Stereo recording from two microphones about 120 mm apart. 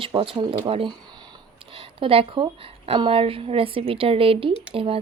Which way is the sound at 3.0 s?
50° right (ahead or behind).